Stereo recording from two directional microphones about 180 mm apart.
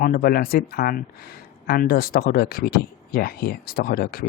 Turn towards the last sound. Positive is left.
turn(degrees=55)  # may be behind; listen again after turning